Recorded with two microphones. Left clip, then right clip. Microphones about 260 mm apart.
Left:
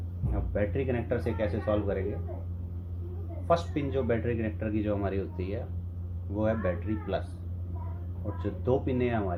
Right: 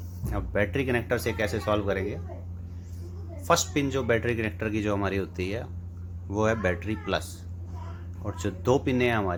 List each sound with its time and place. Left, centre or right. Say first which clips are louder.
0.5 s a man's voice: right 4 dB; right
3.4 s a man's voice: right 3 dB; right
8.4 s a man's voice: right 4 dB; right